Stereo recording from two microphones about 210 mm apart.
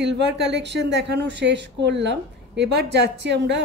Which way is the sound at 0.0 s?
55° right (ahead or behind).